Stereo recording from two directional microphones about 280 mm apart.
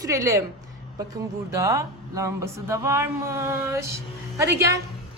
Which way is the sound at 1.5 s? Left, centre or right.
Centre.